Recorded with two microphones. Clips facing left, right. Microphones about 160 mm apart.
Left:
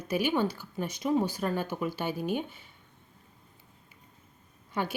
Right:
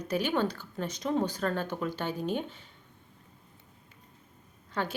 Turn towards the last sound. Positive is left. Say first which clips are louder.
# left 1 dB
turn(degrees=15)  # may be behind; listen again after turning